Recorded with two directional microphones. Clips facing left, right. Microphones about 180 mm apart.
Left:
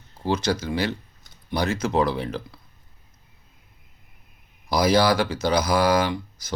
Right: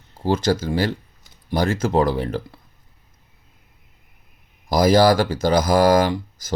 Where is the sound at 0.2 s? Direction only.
50° right (ahead or behind).